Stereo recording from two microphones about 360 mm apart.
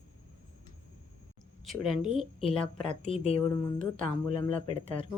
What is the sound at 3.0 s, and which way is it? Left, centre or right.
Speech, centre.